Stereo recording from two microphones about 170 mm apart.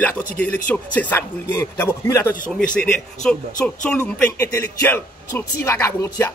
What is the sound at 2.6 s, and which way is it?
Speech, 50° left (ahead or behind).